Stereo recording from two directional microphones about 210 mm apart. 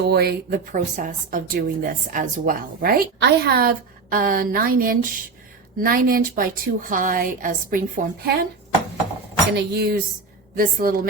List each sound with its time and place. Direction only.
0.0 s a woman's voice: 50° right (ahead or behind)
9.6 s a woman's voice: 50° right (ahead or behind)